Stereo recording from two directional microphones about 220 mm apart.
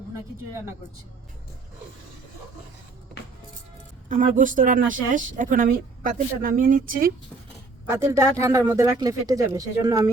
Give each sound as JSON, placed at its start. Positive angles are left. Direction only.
{"t": 4.1, "sound": "speech", "side_deg": -35}
{"t": 7.9, "sound": "speech", "side_deg": -10}